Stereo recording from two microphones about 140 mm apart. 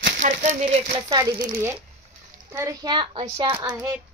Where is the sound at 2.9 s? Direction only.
40° right (ahead or behind).